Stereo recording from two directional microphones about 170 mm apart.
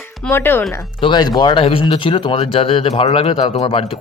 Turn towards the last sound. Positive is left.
turn(degrees=30)  # may be behind; listen again after turning